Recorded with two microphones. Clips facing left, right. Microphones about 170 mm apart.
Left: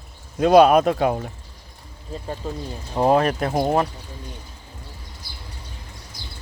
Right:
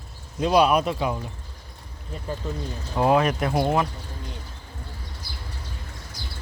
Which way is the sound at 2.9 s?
35° left (ahead or behind).